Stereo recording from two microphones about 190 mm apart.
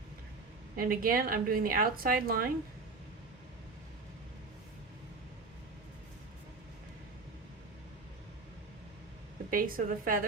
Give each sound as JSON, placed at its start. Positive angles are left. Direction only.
{"t": 0.8, "sound": "a woman's voice", "side_deg": -45}
{"t": 9.5, "sound": "a woman's voice", "side_deg": -50}